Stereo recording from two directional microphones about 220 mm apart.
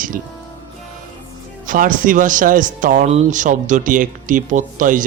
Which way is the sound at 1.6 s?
35° right (ahead or behind).